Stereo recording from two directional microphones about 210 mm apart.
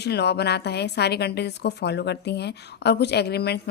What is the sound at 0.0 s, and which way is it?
A woman's voice, 50° left (ahead or behind).